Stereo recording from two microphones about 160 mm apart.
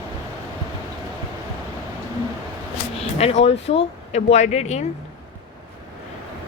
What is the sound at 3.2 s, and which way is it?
Speech, 40° left (ahead or behind).